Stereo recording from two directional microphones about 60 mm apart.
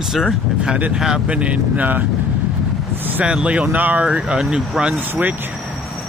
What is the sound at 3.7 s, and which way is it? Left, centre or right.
Speech, right.